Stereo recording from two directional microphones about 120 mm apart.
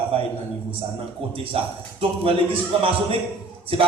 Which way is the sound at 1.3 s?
50° right (ahead or behind).